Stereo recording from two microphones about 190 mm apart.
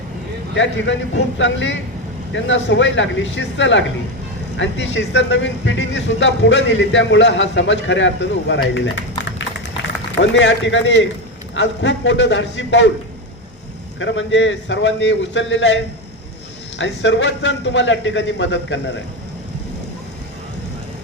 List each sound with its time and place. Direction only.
0.5 s speech: 75° left (ahead or behind)
10.3 s speech: 70° left (ahead or behind)
14.0 s speech: 75° left (ahead or behind)